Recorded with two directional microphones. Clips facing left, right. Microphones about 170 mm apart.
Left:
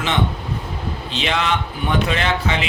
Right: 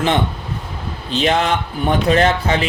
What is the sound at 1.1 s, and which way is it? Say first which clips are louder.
Speech: right 5 dB; 45° right (ahead or behind).